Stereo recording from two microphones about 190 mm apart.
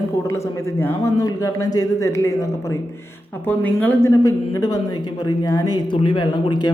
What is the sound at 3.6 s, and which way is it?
A man's voice, 10° left (ahead or behind).